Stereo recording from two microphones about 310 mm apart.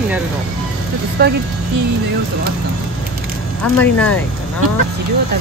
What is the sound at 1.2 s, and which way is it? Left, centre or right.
Speech, right.